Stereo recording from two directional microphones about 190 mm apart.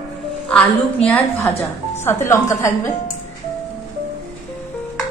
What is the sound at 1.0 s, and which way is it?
A woman's voice, 10° left (ahead or behind).